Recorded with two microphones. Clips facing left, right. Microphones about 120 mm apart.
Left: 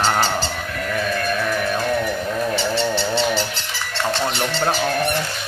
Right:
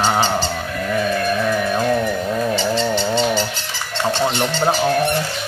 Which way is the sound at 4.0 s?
15° right (ahead or behind).